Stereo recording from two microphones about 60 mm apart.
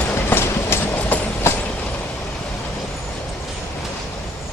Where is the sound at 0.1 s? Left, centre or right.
Left.